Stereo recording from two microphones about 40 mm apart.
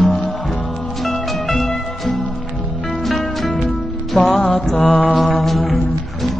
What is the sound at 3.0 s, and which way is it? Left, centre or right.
Music, centre.